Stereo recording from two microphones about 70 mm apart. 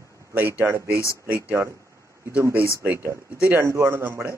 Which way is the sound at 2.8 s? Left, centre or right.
Right.